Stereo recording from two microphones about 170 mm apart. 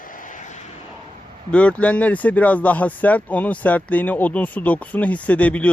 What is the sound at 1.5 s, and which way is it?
Speech, 5° left (ahead or behind).